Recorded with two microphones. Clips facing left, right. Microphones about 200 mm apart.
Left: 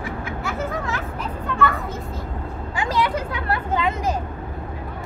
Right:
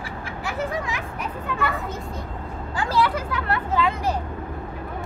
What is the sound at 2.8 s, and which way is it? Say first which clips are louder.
Speech: even; 20° left (ahead or behind).